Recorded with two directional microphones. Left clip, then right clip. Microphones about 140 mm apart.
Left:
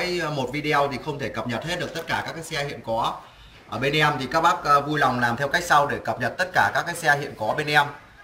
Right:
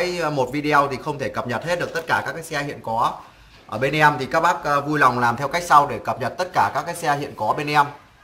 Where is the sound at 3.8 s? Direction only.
60° right (ahead or behind).